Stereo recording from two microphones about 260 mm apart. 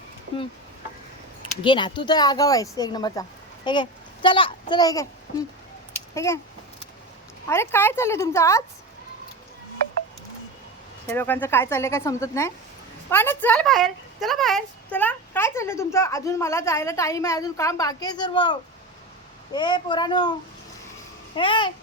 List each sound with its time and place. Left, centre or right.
1.4 s a woman's voice: centre
7.4 s a woman's voice: centre
11.0 s a woman's voice: centre
19.5 s a woman's voice: centre
21.3 s a woman's voice: centre